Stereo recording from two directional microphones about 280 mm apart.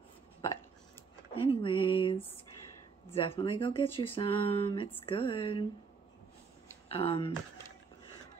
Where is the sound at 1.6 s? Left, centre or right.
Centre.